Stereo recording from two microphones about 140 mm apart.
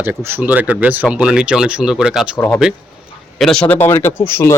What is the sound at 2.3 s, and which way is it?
Speech, 15° left (ahead or behind).